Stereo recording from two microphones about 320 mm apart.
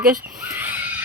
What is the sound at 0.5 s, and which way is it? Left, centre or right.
Neigh, centre.